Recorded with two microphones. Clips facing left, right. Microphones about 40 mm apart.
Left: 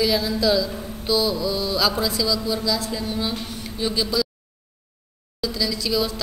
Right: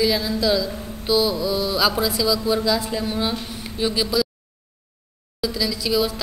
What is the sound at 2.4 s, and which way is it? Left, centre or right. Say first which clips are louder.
A woman's voice: right 3 dB; right.